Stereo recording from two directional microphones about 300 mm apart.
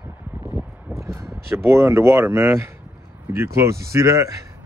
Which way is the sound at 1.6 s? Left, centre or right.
Centre.